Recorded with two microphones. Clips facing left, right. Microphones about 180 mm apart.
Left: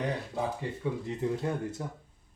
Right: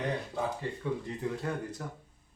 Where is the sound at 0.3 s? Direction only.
15° left (ahead or behind).